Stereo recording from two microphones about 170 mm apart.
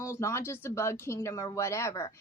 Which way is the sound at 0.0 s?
15° left (ahead or behind).